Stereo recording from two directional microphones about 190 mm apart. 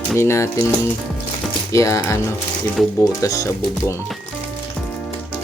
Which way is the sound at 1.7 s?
15° left (ahead or behind).